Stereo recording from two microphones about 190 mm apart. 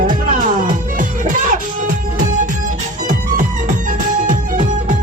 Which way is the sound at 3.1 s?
40° right (ahead or behind).